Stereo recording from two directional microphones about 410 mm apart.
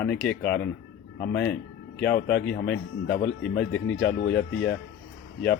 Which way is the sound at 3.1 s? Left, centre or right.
Left.